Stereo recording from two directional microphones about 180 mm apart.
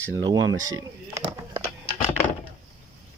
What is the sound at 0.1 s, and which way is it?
Speech, 20° right (ahead or behind).